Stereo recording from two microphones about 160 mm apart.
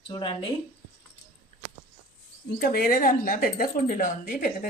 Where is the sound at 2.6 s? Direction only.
65° left (ahead or behind).